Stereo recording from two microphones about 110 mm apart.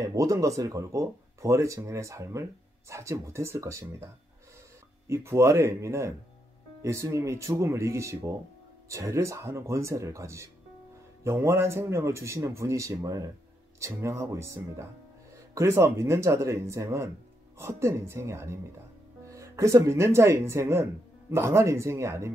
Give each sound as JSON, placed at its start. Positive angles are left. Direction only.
{"t": 0.0, "sound": "speech", "side_deg": -30}